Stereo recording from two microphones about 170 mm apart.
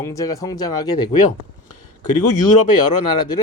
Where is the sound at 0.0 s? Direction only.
20° left (ahead or behind).